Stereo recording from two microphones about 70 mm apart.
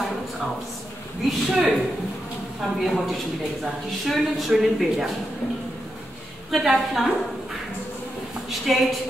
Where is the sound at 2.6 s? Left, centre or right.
Centre.